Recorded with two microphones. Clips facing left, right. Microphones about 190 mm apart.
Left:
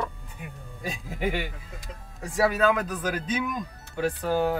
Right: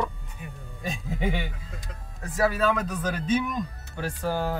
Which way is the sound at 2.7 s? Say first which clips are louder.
Even; 5° left (ahead or behind).